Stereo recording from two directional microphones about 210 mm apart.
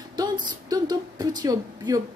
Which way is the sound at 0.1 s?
20° right (ahead or behind).